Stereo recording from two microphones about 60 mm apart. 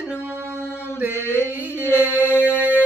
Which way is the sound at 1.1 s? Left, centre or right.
Left.